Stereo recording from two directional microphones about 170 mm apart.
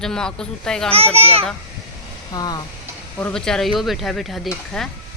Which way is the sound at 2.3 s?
25° left (ahead or behind).